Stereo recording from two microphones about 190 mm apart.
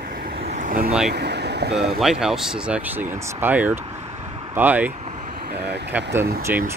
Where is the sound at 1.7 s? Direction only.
Centre (ahead or behind).